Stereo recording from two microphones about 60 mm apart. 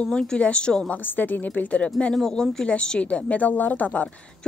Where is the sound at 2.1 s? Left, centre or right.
Centre.